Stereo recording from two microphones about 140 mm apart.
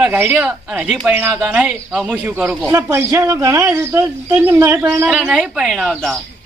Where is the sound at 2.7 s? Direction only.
20° right (ahead or behind).